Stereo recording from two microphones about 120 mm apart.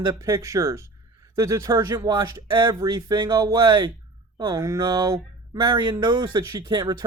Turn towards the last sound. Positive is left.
turn(degrees=-40)  # may be behind; listen again after turning